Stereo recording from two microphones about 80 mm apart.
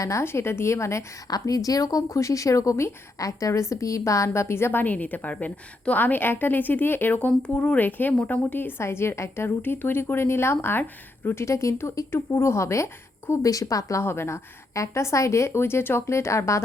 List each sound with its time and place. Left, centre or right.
0.0 s speech: left
1.3 s speech: left
11.4 s speech: left